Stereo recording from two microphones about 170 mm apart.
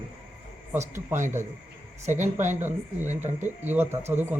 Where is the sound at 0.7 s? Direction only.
15° right (ahead or behind).